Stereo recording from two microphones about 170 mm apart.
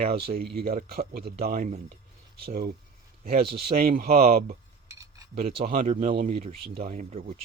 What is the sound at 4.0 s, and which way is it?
Speech, 65° right (ahead or behind).